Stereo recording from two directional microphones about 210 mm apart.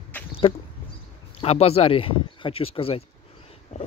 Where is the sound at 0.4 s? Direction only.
25° left (ahead or behind).